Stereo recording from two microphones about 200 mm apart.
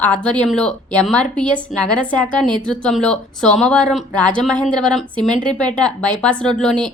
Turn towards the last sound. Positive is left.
turn(degrees=5)  # may be behind; listen again after turning